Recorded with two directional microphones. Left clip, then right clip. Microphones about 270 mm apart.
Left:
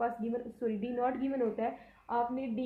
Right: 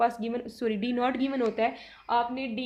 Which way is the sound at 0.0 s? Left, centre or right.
Right.